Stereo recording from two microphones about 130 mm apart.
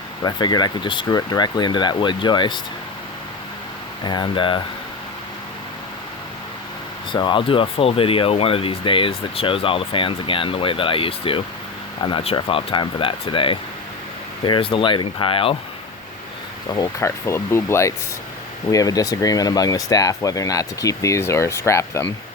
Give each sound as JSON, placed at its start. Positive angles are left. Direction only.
{"t": 0.2, "sound": "speech", "side_deg": 35}
{"t": 4.0, "sound": "speech", "side_deg": 35}
{"t": 7.1, "sound": "speech", "side_deg": 40}
{"t": 17.0, "sound": "speech", "side_deg": 20}